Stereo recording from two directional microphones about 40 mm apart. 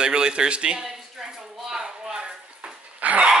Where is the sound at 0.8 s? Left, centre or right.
Centre.